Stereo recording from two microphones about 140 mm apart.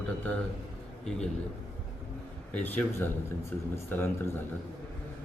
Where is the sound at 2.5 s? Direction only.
10° left (ahead or behind).